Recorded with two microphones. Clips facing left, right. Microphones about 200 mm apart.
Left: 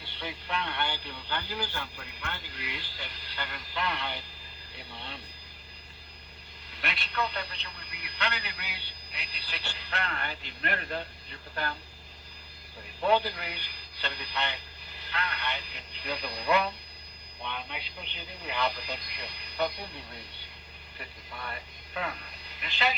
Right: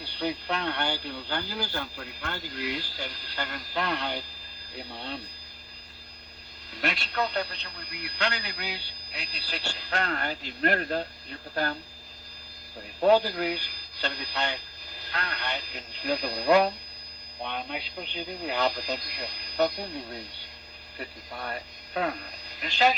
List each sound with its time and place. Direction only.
0.0 s speech: 40° right (ahead or behind)
6.7 s speech: 45° right (ahead or behind)
13.0 s speech: 40° right (ahead or behind)